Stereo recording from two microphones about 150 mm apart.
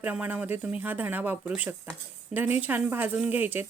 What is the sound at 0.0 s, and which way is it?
A woman's voice, 10° right (ahead or behind).